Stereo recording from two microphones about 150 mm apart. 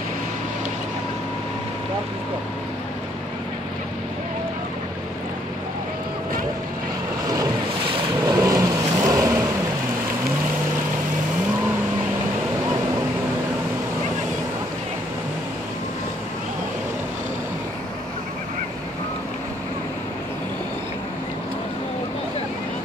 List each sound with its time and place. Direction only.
8.3 s vehicle: 25° right (ahead or behind)